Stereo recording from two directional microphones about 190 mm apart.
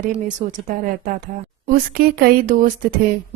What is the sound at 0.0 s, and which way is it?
A woman's voice, 45° right (ahead or behind).